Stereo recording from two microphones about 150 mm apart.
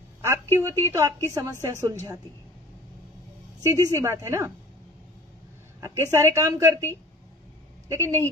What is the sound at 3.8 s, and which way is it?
Speech, 20° right (ahead or behind).